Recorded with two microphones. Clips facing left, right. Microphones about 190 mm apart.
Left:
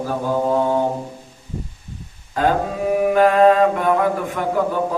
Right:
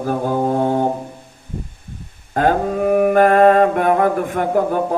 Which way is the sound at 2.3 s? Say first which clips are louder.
Right 3 dB; 55° right (ahead or behind).